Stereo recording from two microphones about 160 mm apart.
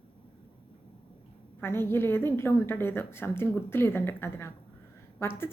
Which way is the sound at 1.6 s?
15° left (ahead or behind).